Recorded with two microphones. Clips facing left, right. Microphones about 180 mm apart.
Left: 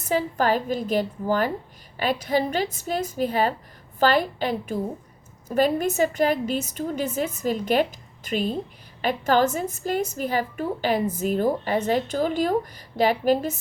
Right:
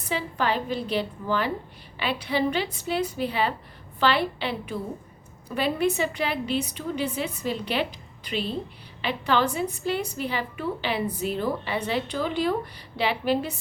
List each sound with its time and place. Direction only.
0.0 s a woman's voice: 45° left (ahead or behind)